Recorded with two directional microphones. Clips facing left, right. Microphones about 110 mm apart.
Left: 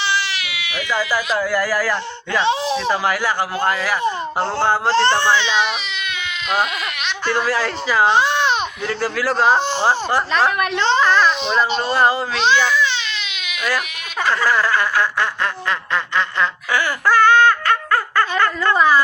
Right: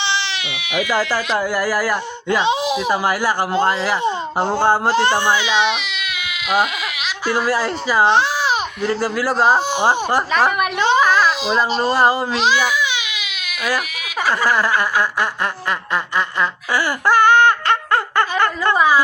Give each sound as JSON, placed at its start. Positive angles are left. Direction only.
{"t": 0.1, "sound": "baby cry", "side_deg": -20}
{"t": 1.4, "sound": "a child's voice", "side_deg": -15}
{"t": 3.5, "sound": "a child's voice", "side_deg": -25}
{"t": 7.3, "sound": "a child's voice", "side_deg": -5}
{"t": 16.1, "sound": "a sound", "side_deg": -10}